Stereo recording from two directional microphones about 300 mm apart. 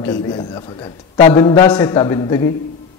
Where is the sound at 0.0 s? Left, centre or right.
Centre.